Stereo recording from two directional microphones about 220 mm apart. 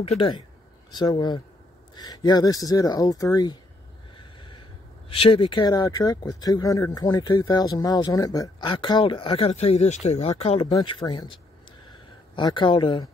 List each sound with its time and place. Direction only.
0.9 s speech: 20° left (ahead or behind)
4.2 s snort: 20° left (ahead or behind)
5.1 s speech: 25° left (ahead or behind)
11.9 s a sound: 20° left (ahead or behind)